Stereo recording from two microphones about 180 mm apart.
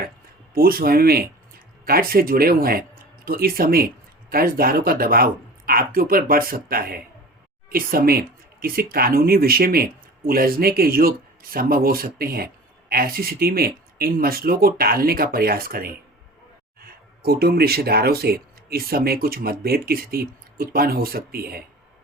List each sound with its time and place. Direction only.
0.5 s speech: 55° right (ahead or behind)